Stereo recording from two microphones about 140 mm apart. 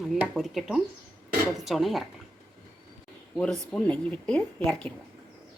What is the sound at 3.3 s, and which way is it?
A woman's voice, 5° left (ahead or behind).